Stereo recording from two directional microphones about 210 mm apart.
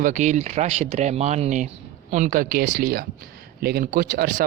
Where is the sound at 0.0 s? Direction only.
35° right (ahead or behind).